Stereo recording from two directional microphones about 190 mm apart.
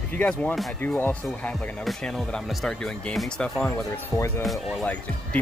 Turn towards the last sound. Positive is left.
turn(degrees=5)  # may be behind; listen again after turning